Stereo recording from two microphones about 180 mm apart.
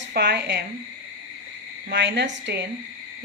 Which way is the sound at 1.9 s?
70° right (ahead or behind).